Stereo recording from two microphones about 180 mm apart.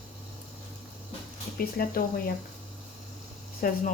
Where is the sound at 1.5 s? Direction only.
55° left (ahead or behind).